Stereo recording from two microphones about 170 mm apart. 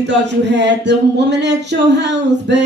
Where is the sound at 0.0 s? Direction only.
90° right.